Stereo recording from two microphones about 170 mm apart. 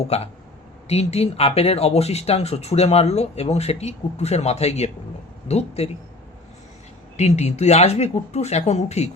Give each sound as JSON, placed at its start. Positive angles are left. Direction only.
{"t": 0.1, "sound": "speech", "side_deg": 40}
{"t": 7.2, "sound": "speech", "side_deg": 40}